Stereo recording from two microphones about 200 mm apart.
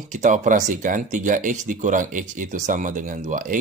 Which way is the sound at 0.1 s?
40° right (ahead or behind).